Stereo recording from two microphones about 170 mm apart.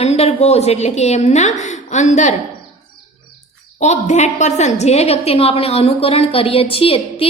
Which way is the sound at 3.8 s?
45° left (ahead or behind).